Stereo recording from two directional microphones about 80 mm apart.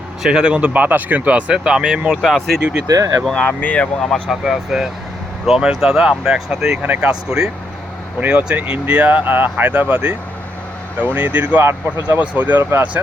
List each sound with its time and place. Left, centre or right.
0.2 s speech: centre
2.2 s speech: centre
2.8 s speech: right
3.2 s speech: centre
4.0 s speech: centre
4.4 s speech: centre
6.8 s speech: right
7.1 s speech: centre